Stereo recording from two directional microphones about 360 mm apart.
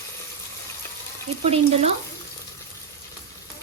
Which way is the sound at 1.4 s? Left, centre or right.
Centre.